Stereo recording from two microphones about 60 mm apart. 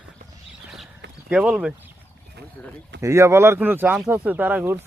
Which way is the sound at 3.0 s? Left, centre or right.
Right.